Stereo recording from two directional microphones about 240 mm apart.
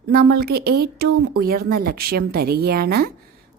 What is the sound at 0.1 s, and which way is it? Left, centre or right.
A woman's voice, right.